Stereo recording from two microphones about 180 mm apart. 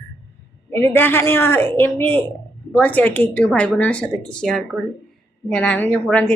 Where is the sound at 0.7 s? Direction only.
10° left (ahead or behind).